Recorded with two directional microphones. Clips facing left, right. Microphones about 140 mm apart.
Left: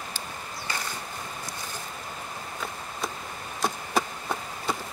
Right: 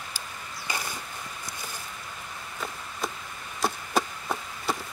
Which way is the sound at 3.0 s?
Centre (ahead or behind).